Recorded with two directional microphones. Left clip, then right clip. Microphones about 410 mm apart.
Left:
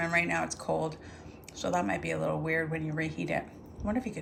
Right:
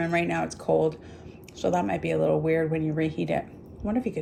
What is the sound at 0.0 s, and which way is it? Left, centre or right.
A woman's voice, centre.